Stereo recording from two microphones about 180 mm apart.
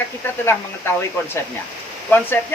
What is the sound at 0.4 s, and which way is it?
Speech, 15° left (ahead or behind).